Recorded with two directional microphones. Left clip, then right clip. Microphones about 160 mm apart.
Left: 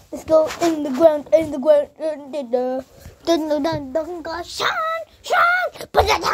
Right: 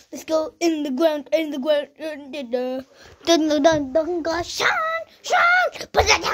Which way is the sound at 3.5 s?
15° right (ahead or behind).